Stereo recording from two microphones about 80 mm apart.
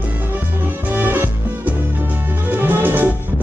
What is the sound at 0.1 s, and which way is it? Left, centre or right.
Music, right.